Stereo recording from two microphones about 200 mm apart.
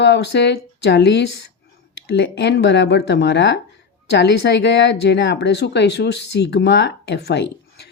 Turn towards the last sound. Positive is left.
turn(degrees=55)  # may be behind; listen again after turning